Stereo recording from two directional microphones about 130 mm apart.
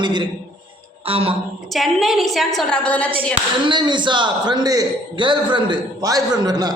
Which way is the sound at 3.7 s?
35° right (ahead or behind).